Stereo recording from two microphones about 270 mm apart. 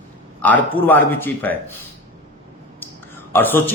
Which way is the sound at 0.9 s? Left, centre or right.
Centre.